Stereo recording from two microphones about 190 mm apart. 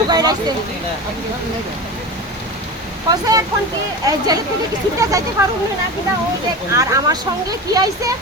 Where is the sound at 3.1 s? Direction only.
20° right (ahead or behind).